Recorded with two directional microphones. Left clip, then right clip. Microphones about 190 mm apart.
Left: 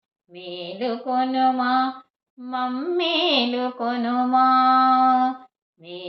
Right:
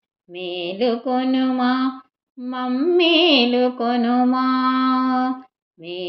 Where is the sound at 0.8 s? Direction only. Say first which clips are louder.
Right 2 dB; 40° right (ahead or behind).